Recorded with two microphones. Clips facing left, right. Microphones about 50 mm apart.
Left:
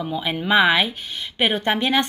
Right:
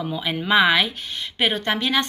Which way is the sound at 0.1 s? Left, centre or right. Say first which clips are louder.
Left 1 dB; centre.